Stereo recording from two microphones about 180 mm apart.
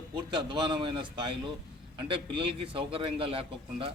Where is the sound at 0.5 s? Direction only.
25° right (ahead or behind).